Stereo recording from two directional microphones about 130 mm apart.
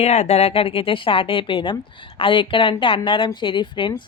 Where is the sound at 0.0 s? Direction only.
55° left (ahead or behind).